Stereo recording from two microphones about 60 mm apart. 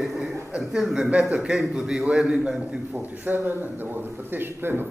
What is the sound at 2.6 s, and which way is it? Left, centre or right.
A man's voice, right.